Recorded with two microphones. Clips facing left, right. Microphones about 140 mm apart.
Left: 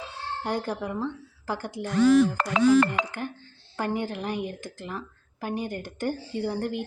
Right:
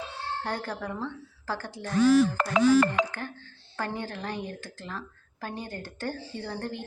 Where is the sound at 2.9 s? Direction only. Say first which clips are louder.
Right 1 dB; 15° left (ahead or behind).